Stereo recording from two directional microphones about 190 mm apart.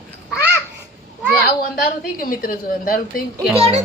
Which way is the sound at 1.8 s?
50° left (ahead or behind).